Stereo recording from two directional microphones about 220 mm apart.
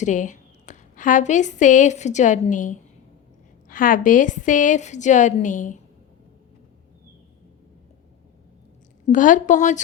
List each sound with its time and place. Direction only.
0.0 s a woman's voice: 35° left (ahead or behind)
9.0 s a woman's voice: 35° left (ahead or behind)